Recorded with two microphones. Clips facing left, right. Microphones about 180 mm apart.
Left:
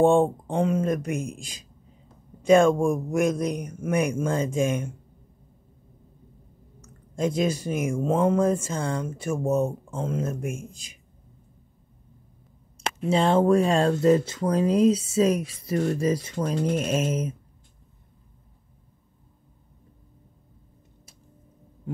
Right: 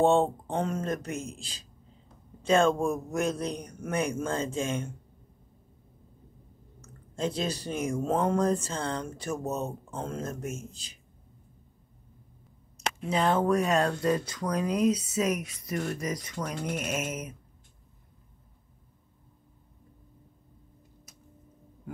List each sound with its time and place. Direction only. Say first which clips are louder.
0.0 s speech: left 4 dB; 15° left (ahead or behind)
2.4 s speech: left 6 dB; 10° left (ahead or behind)
6.8 s speech: left 5 dB; 10° left (ahead or behind)
13.1 s speech: left 5 dB; 25° left (ahead or behind)